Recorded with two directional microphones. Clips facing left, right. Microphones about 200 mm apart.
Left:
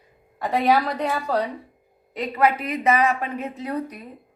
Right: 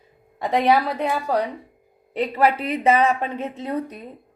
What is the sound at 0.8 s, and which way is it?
Speech, 5° right (ahead or behind).